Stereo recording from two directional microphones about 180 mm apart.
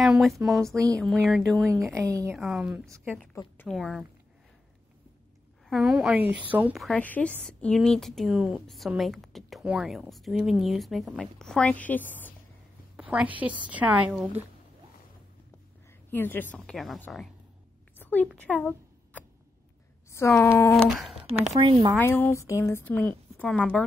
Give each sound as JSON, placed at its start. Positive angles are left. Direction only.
{"t": 0.0, "sound": "a woman's voice", "side_deg": 0}
{"t": 1.9, "sound": "a woman's voice", "side_deg": -15}
{"t": 2.3, "sound": "a woman's voice", "side_deg": 0}
{"t": 5.7, "sound": "a woman's voice", "side_deg": 0}
{"t": 12.9, "sound": "a woman's voice", "side_deg": -5}
{"t": 16.1, "sound": "a woman's voice", "side_deg": 10}
{"t": 17.9, "sound": "a sound", "side_deg": 10}
{"t": 20.1, "sound": "a woman's voice", "side_deg": 15}
{"t": 20.7, "sound": "a woman's voice", "side_deg": 0}
{"t": 21.3, "sound": "speech", "side_deg": -30}
{"t": 21.9, "sound": "a woman's voice", "side_deg": 10}